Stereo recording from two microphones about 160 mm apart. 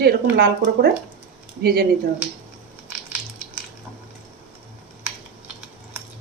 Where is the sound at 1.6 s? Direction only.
75° right (ahead or behind).